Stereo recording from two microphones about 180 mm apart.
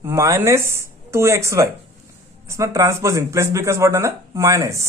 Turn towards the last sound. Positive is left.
turn(degrees=-15)  # may be behind; listen again after turning